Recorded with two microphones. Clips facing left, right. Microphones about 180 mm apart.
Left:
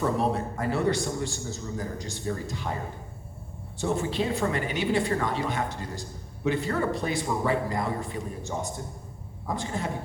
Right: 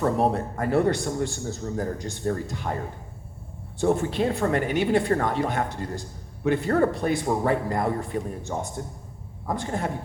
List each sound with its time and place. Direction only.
0.2 s a woman's voice: 55° right (ahead or behind)
3.8 s a woman's voice: 55° right (ahead or behind)